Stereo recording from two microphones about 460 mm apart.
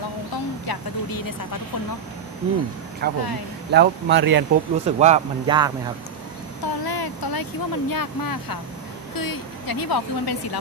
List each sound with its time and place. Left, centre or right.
0.7 s speech: left
3.0 s speech: centre
6.6 s speech: left